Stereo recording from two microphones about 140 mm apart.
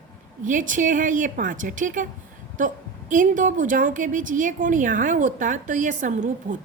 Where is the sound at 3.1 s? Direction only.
65° right (ahead or behind).